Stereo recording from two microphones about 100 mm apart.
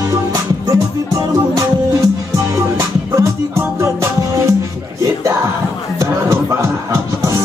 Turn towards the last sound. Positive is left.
turn(degrees=-25)  # may be behind; listen again after turning